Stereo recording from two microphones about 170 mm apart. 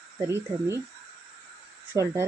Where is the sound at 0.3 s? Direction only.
15° right (ahead or behind).